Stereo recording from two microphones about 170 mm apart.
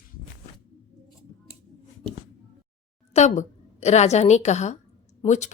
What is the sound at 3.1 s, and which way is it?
A woman's voice, 40° left (ahead or behind).